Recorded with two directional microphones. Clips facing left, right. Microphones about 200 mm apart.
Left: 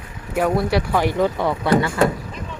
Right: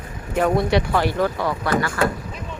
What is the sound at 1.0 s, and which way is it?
Speech, 20° left (ahead or behind).